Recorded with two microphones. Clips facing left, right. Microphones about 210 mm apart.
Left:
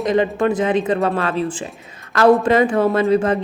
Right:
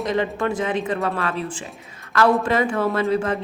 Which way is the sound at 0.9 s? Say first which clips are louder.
Left 5 dB; 30° left (ahead or behind).